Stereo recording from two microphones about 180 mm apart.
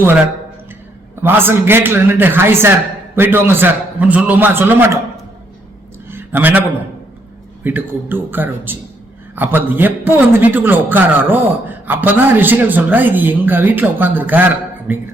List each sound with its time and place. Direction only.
1.2 s a man's voice: 10° right (ahead or behind)
6.1 s a sound: 10° right (ahead or behind)
7.6 s a man's voice: 10° right (ahead or behind)